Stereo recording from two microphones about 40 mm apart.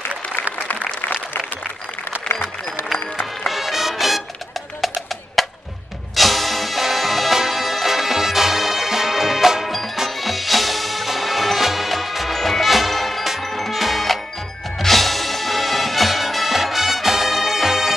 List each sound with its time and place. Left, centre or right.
0.7 s applause: left
2.9 s music: centre